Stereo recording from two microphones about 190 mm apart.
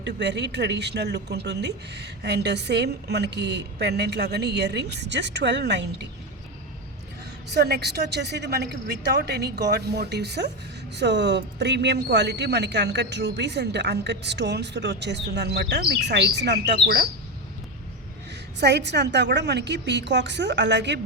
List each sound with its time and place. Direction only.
0.0 s speech: 65° right (ahead or behind)
7.5 s speech: 60° right (ahead or behind)
18.6 s speech: 65° right (ahead or behind)